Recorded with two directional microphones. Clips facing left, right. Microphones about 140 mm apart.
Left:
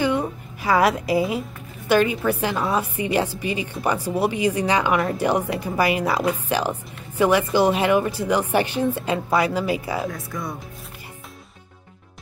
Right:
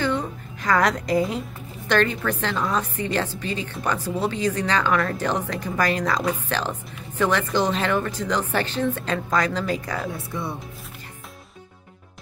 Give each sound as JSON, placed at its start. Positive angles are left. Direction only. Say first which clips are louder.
{"t": 0.0, "sound": "a sound", "louder": "left 3 dB", "side_deg": 10}
{"t": 1.9, "sound": "a woman's voice", "louder": "left 3 dB", "side_deg": 10}
{"t": 10.1, "sound": "speech", "louder": "even", "side_deg": -30}